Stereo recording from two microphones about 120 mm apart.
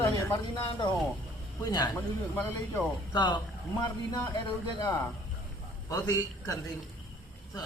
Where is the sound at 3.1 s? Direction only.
40° left (ahead or behind).